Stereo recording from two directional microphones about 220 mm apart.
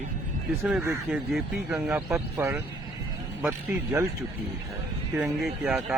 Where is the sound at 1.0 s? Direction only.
Centre (ahead or behind).